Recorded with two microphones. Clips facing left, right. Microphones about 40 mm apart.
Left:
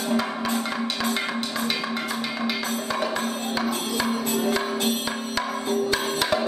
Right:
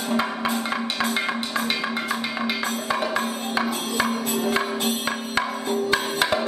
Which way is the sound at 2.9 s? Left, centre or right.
Centre.